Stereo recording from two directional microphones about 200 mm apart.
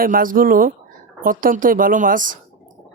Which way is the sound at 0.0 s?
45° right (ahead or behind).